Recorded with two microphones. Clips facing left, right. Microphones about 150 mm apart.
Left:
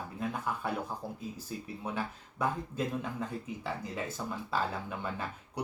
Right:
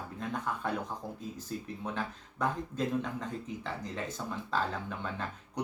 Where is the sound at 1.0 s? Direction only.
15° right (ahead or behind).